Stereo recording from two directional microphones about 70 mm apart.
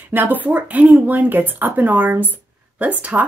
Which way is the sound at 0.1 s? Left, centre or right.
Right.